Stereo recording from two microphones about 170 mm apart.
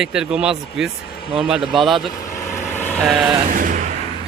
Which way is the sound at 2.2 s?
15° left (ahead or behind).